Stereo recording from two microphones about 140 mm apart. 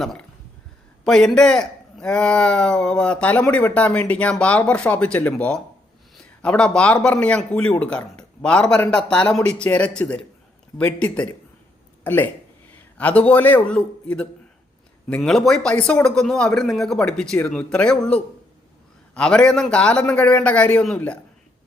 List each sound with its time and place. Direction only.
1.0 s speech: 5° left (ahead or behind)